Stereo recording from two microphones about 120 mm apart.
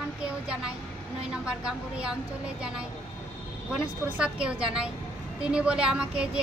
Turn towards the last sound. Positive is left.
turn(degrees=-5)  # may be behind; listen again after turning